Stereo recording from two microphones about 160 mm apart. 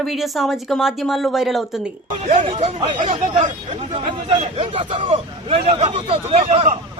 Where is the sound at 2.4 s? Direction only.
35° right (ahead or behind).